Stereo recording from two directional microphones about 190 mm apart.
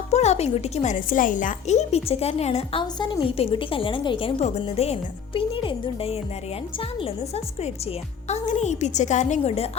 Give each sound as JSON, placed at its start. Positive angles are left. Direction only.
{"t": 0.1, "sound": "a woman's voice", "side_deg": 35}
{"t": 2.8, "sound": "a woman's voice", "side_deg": 25}